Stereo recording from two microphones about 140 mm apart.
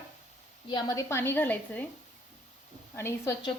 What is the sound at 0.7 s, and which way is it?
A woman's voice, 25° left (ahead or behind).